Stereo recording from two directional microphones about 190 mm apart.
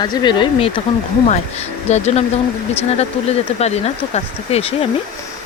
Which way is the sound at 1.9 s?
35° left (ahead or behind).